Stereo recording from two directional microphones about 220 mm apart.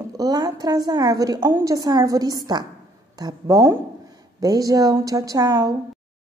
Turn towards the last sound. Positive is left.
turn(degrees=-15)  # may be behind; listen again after turning